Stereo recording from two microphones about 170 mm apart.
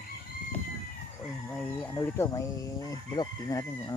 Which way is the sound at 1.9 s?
20° left (ahead or behind).